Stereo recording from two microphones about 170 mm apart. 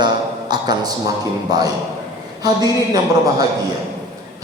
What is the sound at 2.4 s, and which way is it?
A man's voice, 25° right (ahead or behind).